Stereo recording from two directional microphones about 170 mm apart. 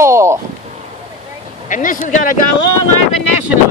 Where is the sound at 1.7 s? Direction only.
50° left (ahead or behind).